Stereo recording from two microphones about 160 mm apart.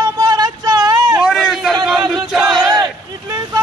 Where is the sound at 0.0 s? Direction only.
25° right (ahead or behind).